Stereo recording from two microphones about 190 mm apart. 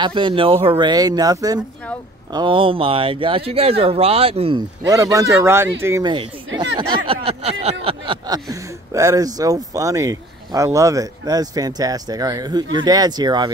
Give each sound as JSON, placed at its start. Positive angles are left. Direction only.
{"t": 0.0, "sound": "speech", "side_deg": -25}